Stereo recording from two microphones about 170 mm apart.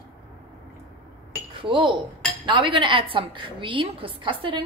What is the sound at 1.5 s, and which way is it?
Speech, 30° right (ahead or behind).